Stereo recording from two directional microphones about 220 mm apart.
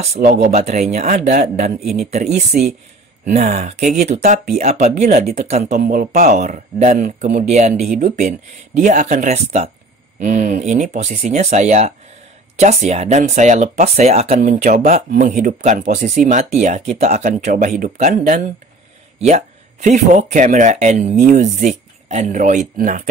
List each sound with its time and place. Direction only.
0.2 s speech: 30° right (ahead or behind)
3.3 s speech: 30° right (ahead or behind)